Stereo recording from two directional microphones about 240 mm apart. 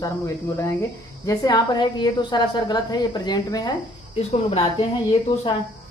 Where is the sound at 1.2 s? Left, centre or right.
Centre.